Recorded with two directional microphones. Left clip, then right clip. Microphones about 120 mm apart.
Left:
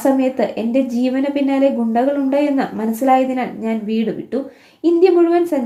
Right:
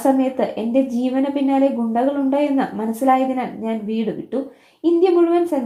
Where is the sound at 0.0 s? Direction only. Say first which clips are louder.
Left 2 dB; 20° right (ahead or behind).